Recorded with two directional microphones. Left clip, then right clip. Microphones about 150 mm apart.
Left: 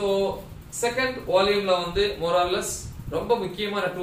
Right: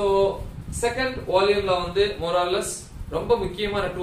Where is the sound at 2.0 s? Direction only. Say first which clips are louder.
Even; 20° right (ahead or behind).